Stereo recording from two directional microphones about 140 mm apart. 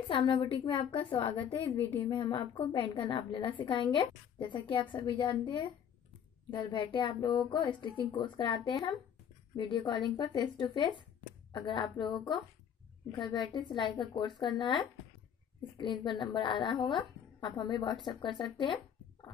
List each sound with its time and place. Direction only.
0.1 s a woman's voice: 40° left (ahead or behind)
1.5 s a woman's voice: 15° left (ahead or behind)
2.0 s a woman's voice: 35° left (ahead or behind)